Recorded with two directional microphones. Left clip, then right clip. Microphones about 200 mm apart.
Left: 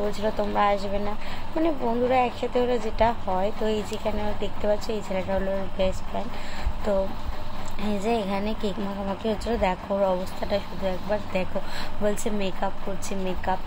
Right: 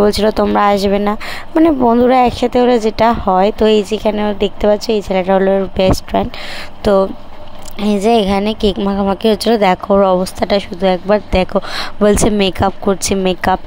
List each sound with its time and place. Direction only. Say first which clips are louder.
0.0 s speech: right 15 dB; 50° right (ahead or behind)
7.8 s speech: right 14 dB; 45° right (ahead or behind)